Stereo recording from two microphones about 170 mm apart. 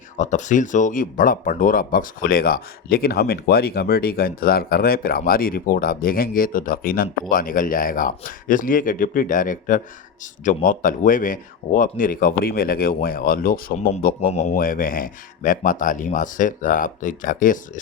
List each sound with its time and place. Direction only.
0.2 s speech: 45° left (ahead or behind)
14.2 s speech: 40° left (ahead or behind)
14.5 s speech: 55° left (ahead or behind)